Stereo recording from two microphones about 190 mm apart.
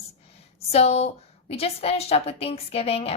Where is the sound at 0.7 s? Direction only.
35° left (ahead or behind).